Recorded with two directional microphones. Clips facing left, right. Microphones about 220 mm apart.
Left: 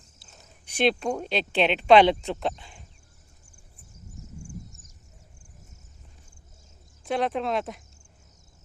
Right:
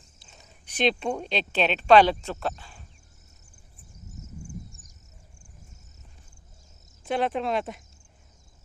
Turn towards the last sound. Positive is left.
turn(degrees=0)  # may be behind; listen again after turning